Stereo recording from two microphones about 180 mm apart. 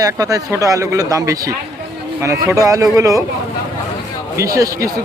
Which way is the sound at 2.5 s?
20° right (ahead or behind).